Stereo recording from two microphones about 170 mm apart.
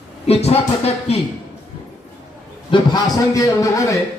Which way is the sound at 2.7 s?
25° left (ahead or behind).